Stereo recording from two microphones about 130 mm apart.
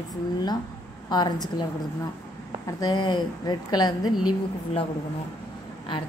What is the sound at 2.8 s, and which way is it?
A woman's voice, 30° left (ahead or behind).